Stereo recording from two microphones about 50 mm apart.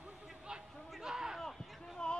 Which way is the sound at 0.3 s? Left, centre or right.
Centre.